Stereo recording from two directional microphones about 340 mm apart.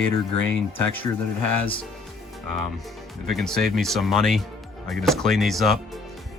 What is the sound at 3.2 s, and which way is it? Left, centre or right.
Speech, centre.